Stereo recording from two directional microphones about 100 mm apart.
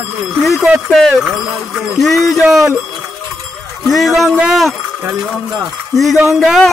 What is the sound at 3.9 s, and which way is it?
Speech, centre (ahead or behind).